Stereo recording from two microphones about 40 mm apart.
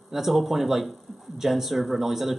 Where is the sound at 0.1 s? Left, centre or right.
Centre.